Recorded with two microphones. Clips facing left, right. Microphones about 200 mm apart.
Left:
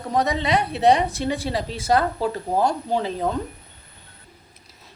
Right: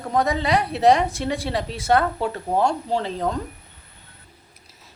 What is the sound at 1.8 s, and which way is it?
Speech, 30° left (ahead or behind).